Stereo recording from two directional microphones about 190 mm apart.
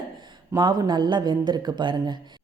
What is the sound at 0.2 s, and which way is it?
Speech, 25° right (ahead or behind).